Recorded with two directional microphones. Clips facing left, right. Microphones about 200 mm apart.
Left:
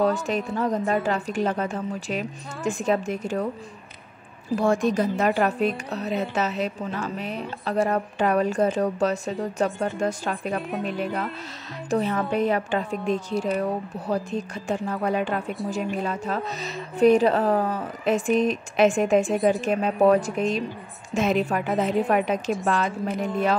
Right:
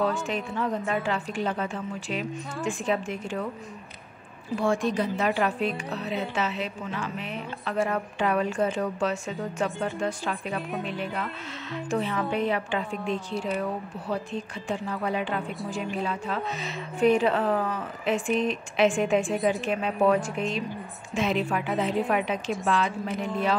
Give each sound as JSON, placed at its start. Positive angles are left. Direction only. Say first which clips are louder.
{"t": 0.0, "sound": "a woman's voice", "louder": "left 4 dB", "side_deg": 40}
{"t": 4.6, "sound": "a woman's voice", "louder": "left 3 dB", "side_deg": 45}